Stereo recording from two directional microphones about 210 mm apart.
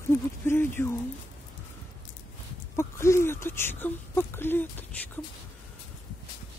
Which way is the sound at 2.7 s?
15° left (ahead or behind).